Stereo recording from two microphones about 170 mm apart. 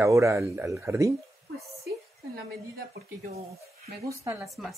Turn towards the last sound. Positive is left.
turn(degrees=0)  # may be behind; listen again after turning